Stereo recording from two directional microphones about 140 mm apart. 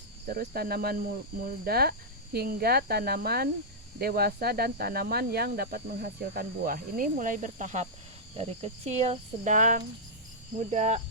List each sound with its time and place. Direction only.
0.3 s speech: 90° right; by 7.9 s 60° right (ahead or behind)
8.4 s speech: 50° right (ahead or behind)
10.6 s cricket: 55° right (ahead or behind)